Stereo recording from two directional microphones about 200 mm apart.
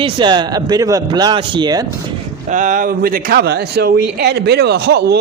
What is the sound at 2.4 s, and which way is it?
A man's voice, 40° right (ahead or behind).